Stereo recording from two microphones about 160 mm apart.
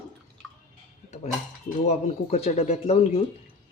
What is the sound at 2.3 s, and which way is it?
Speech, 40° left (ahead or behind).